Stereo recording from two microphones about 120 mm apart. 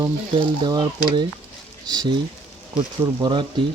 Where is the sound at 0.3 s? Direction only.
40° right (ahead or behind).